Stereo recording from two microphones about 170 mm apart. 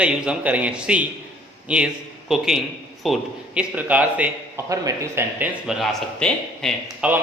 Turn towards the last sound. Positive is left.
turn(degrees=0)  # may be behind; listen again after turning